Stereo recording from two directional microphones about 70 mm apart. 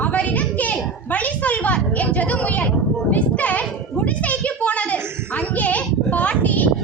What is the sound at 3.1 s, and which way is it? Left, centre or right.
Children playing, left.